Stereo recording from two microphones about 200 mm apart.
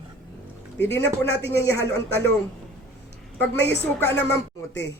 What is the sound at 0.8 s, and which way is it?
Speech, 10° left (ahead or behind).